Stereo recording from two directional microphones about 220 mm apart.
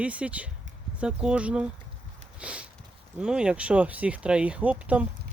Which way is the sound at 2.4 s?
5° right (ahead or behind).